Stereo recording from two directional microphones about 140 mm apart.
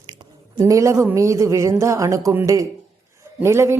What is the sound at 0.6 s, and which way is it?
A woman's voice, 20° right (ahead or behind).